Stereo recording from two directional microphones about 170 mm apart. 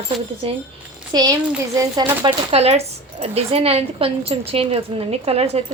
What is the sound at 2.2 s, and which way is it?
Speech, 35° right (ahead or behind).